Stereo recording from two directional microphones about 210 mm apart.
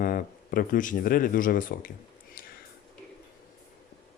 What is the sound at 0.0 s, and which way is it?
Speech, 40° left (ahead or behind).